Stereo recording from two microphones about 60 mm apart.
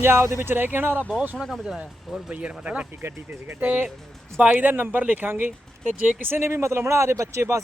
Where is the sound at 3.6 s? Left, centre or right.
Right.